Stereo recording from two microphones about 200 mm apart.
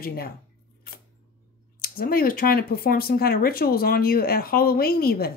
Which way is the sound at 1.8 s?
45° left (ahead or behind).